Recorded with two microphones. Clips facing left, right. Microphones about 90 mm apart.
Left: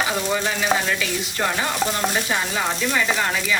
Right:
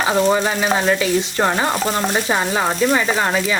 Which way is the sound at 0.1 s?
40° right (ahead or behind).